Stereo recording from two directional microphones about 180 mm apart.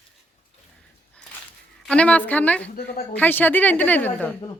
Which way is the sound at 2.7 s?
55° left (ahead or behind).